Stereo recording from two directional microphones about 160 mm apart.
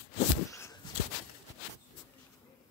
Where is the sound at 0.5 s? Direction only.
15° left (ahead or behind).